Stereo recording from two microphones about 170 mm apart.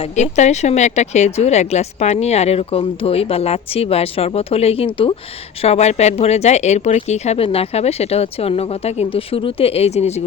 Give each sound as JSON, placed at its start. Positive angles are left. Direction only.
{"t": 0.0, "sound": "a woman's voice", "side_deg": 45}